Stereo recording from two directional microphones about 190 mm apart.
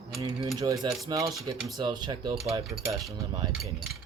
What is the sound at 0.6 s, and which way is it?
Speech, 15° right (ahead or behind).